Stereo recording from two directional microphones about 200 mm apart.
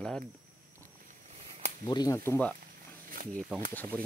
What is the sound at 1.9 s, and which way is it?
Speech, 20° left (ahead or behind).